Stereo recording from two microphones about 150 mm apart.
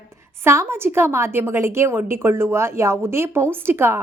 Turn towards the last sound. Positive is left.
turn(degrees=-15)  # may be behind; listen again after turning